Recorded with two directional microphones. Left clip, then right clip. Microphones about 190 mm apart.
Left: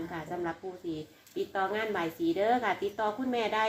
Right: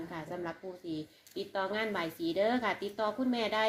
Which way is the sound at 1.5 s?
60° right (ahead or behind).